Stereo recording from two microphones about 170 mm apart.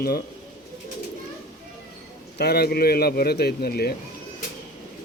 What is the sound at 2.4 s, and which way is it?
Speech, 70° left (ahead or behind).